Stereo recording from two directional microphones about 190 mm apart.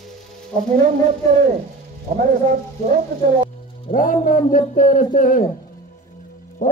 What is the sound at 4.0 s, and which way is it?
A man's voice, 45° left (ahead or behind).